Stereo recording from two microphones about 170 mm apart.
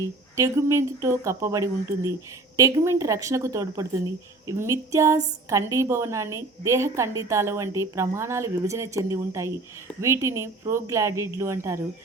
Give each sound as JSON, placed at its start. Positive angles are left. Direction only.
{"t": 0.0, "sound": "speech", "side_deg": -20}